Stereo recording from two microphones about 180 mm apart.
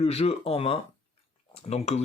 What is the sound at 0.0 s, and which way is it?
Speech, 35° left (ahead or behind).